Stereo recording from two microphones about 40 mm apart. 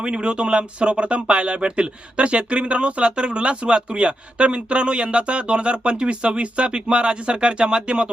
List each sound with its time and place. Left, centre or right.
0.0 s speech: right